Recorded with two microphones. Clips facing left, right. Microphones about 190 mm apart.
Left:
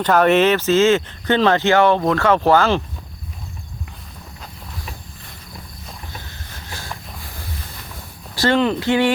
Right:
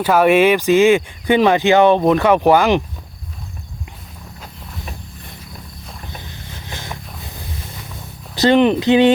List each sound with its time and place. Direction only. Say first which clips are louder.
0.0 s speech: right 2 dB; 10° right (ahead or behind)
6.2 s a sound: right 3 dB; 20° right (ahead or behind)
8.4 s speech: right 5 dB; 20° right (ahead or behind)